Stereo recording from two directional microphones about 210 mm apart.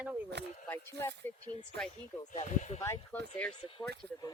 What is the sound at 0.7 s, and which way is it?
Speech, 10° left (ahead or behind).